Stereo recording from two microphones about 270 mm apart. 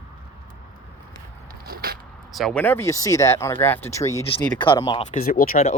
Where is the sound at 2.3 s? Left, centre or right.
Centre.